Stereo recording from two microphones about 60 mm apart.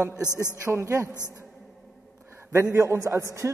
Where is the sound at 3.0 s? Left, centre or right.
Right.